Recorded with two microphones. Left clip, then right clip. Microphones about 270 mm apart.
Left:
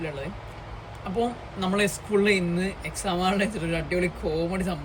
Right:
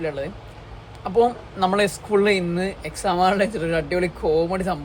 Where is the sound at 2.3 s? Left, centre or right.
Centre.